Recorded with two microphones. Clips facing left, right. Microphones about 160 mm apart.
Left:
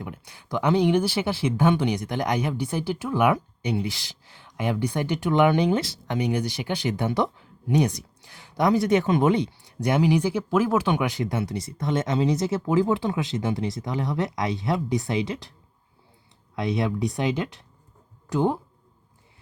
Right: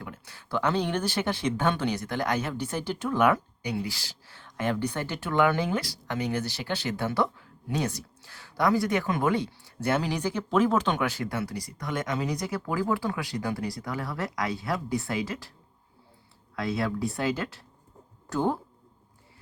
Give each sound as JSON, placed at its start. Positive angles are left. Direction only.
{"t": 0.0, "sound": "speech", "side_deg": 15}
{"t": 3.6, "sound": "speech", "side_deg": 20}
{"t": 16.6, "sound": "speech", "side_deg": 20}